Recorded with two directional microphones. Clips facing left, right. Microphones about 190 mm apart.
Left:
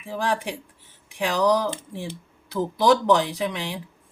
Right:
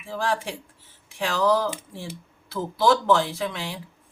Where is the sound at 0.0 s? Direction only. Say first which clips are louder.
Left 1 dB; 15° left (ahead or behind).